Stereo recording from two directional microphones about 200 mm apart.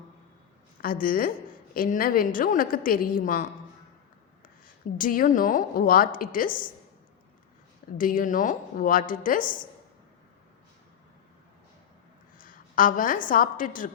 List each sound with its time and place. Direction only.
0.8 s a woman's voice: 45° left (ahead or behind)
4.9 s a woman's voice: 45° left (ahead or behind)
7.9 s a woman's voice: 45° left (ahead or behind)
12.4 s a woman's voice: 45° left (ahead or behind)